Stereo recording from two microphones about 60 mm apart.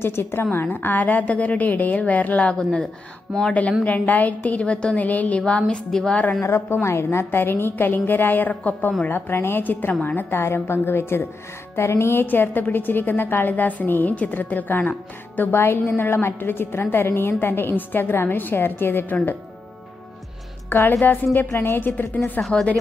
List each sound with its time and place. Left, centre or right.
0.0 s a woman's voice: left; by 2.9 s centre
3.8 s a woman's voice: left
5.5 s a woman's voice: centre
6.5 s a woman's voice: left
7.2 s a woman's voice: left
21.0 s a woman's voice: left
21.4 s a woman's voice: left